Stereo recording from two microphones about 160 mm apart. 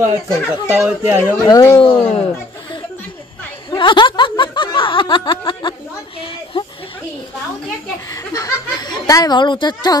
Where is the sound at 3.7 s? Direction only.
30° left (ahead or behind).